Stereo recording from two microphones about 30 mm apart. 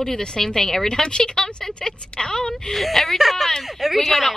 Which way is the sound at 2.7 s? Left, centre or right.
Centre.